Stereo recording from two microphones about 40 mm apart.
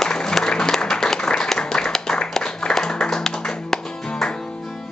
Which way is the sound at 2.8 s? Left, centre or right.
Centre.